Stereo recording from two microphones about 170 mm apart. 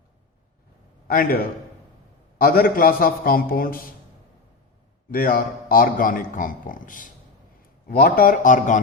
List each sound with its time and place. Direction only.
1.0 s a man's voice: 60° left (ahead or behind)
2.4 s a man's voice: 60° left (ahead or behind)
5.1 s a man's voice: 60° left (ahead or behind)